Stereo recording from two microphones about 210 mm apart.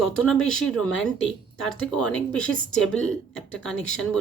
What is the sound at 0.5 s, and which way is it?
Speech, 5° left (ahead or behind).